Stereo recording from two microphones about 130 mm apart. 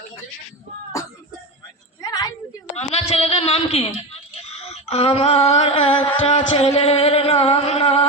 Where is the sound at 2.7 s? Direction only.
55° left (ahead or behind).